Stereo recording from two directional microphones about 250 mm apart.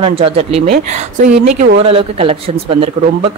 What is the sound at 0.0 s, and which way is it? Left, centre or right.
Speech, right.